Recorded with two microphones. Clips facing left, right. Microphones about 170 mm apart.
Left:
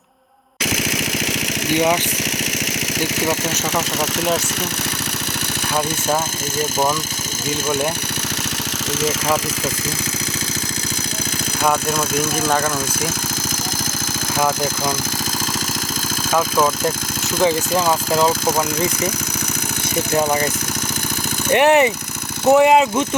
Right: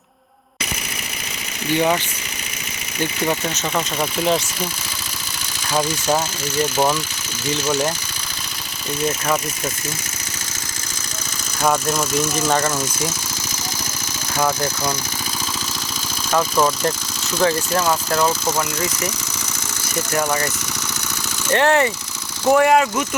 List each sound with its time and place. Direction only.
0.6 s a sound: 90° left
1.7 s speech: 15° left (ahead or behind)
12.5 s speech: centre (ahead or behind)
14.3 s speech: 5° left (ahead or behind)
16.3 s speech: 5° left (ahead or behind)
21.5 s speech: 15° left (ahead or behind)